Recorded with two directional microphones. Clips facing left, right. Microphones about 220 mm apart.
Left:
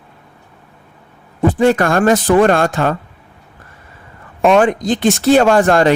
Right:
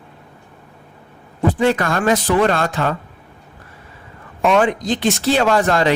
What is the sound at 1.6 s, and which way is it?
Speech, 50° left (ahead or behind).